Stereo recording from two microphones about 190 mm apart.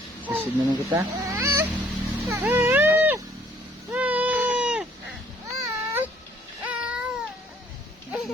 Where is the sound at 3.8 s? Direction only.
5° right (ahead or behind).